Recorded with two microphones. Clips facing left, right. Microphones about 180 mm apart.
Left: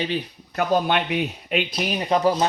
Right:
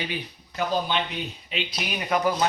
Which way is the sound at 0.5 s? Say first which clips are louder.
Left 5 dB; 60° left (ahead or behind).